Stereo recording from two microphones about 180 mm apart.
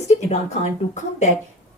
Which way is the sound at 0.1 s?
35° left (ahead or behind).